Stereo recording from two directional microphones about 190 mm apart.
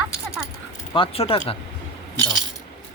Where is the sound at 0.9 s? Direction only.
30° left (ahead or behind).